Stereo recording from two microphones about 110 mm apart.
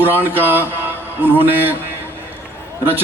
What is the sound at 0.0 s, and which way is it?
A man's voice, 20° right (ahead or behind).